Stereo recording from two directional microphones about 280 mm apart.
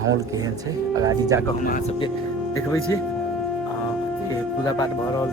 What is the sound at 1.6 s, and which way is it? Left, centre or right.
Speech, left.